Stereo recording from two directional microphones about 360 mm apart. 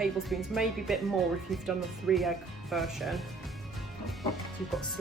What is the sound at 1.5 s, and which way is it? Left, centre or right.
Speech, centre.